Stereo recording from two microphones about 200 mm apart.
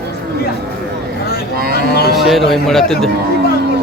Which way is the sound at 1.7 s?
50° left (ahead or behind).